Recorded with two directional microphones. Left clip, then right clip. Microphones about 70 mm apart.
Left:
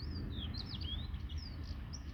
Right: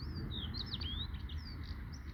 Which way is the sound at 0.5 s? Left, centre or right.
Left.